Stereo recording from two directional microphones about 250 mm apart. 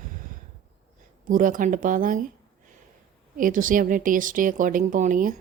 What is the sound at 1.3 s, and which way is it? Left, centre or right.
Speech, right.